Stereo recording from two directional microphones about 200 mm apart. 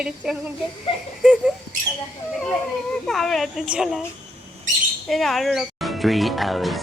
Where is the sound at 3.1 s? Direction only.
Centre (ahead or behind).